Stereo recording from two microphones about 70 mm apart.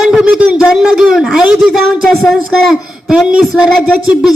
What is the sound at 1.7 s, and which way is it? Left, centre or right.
Speech, centre.